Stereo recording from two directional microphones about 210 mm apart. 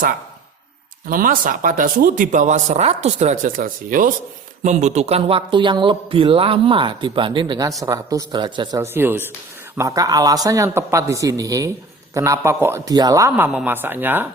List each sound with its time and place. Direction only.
1.0 s a man's voice: 40° right (ahead or behind); by 14.3 s 10° right (ahead or behind)